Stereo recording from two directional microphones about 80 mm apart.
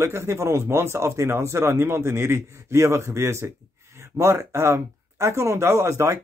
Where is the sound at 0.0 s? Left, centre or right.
Right.